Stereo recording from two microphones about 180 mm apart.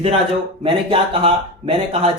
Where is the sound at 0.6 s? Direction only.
30° right (ahead or behind).